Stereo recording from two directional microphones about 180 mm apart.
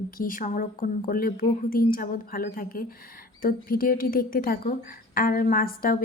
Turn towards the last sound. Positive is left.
turn(degrees=55)  # may be behind; listen again after turning